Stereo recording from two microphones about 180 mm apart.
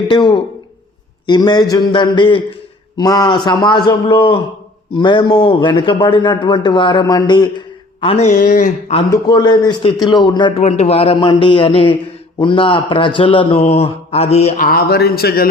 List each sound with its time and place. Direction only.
0.1 s a man's voice: 25° left (ahead or behind)
8.0 s a man's voice: 40° left (ahead or behind)
9.0 s a man's voice: 20° left (ahead or behind)
10.6 s a man's voice: 35° left (ahead or behind)
14.6 s speech: 55° left (ahead or behind)